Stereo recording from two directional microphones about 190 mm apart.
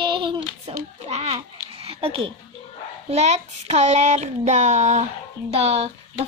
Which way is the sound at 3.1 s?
35° right (ahead or behind).